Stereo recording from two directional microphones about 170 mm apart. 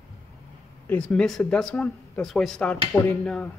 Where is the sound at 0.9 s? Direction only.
5° left (ahead or behind).